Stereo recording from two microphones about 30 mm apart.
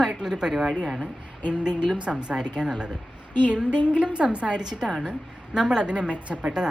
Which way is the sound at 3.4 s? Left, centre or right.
Right.